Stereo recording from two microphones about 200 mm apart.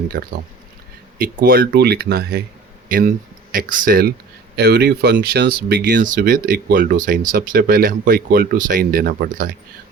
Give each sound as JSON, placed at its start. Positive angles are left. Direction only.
{"t": 0.2, "sound": "speech", "side_deg": -50}